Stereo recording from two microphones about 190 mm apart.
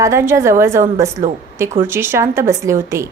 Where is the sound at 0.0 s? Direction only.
15° right (ahead or behind).